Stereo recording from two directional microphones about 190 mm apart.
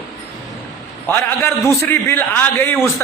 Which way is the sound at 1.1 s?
15° left (ahead or behind).